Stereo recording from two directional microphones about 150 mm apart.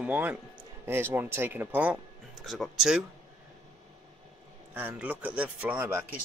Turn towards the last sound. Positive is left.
turn(degrees=-10)  # may be behind; listen again after turning